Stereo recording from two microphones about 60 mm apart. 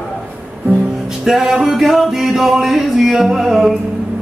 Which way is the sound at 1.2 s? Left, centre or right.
Centre.